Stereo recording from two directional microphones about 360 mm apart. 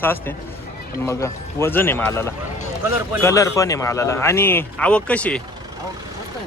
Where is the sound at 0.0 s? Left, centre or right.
Centre.